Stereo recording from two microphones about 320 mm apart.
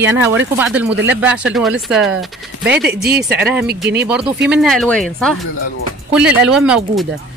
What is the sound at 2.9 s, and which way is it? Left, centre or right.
Speech, right.